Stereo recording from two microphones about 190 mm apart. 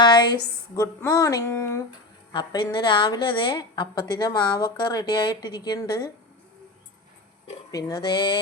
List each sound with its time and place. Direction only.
0.0 s a sound: 20° left (ahead or behind)
2.3 s a woman's voice: 25° left (ahead or behind)
7.7 s a woman's voice: 20° left (ahead or behind)